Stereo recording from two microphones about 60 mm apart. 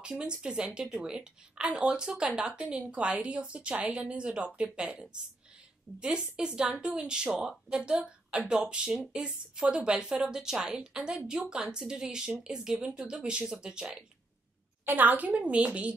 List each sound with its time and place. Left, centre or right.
0.0 s a woman's voice: centre
5.9 s speech: centre
14.9 s a woman's voice: right